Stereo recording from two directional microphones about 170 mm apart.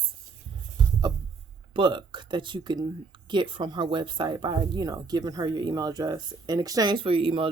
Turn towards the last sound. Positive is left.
turn(degrees=-30)  # may be behind; listen again after turning